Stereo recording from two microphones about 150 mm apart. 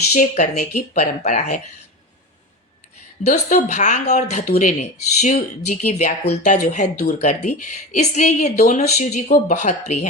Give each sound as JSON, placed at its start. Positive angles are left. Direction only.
{"t": 0.1, "sound": "speech", "side_deg": 55}
{"t": 3.2, "sound": "speech", "side_deg": 50}